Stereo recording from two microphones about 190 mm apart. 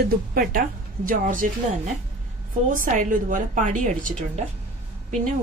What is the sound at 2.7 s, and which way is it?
A woman's voice, 45° right (ahead or behind).